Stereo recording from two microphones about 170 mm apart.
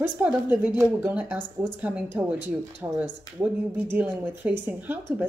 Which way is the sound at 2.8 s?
20° right (ahead or behind).